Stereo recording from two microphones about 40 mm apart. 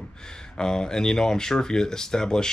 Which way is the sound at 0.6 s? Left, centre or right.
Centre.